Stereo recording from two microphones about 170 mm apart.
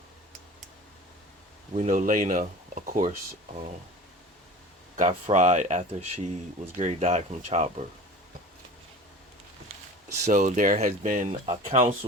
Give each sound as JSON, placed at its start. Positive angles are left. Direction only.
{"t": 1.7, "sound": "speech", "side_deg": -45}
{"t": 4.9, "sound": "speech", "side_deg": -45}
{"t": 10.2, "sound": "speech", "side_deg": -45}